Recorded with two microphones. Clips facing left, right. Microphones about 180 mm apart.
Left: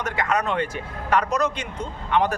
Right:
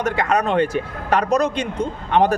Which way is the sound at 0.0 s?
30° right (ahead or behind).